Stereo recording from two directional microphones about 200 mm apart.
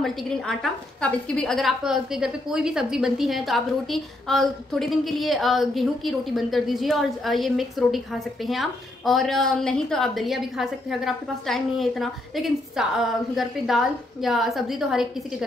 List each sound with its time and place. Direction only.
0.0 s a woman's voice: centre (ahead or behind)